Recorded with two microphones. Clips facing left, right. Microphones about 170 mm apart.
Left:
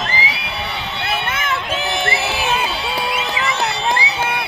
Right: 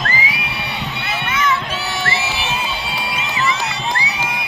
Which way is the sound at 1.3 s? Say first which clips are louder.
Right 2 dB; 55° left (ahead or behind).